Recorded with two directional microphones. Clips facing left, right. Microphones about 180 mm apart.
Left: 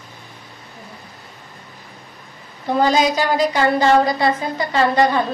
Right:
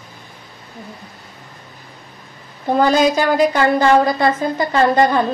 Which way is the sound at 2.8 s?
55° right (ahead or behind).